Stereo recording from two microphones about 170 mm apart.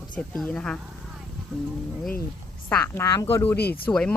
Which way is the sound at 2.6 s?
10° left (ahead or behind).